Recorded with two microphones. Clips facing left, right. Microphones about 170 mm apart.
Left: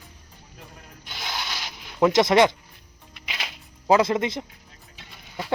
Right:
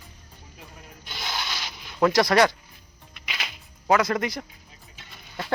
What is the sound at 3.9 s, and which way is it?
Speech, 25° left (ahead or behind).